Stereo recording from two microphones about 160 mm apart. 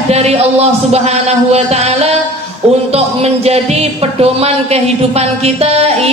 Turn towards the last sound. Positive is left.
turn(degrees=-40)  # may be behind; listen again after turning